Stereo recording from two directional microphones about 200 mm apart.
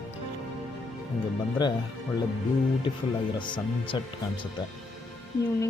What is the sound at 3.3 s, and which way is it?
Speech, 25° left (ahead or behind).